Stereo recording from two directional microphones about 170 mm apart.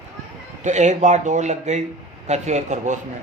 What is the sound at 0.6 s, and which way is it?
A man's voice, 45° right (ahead or behind).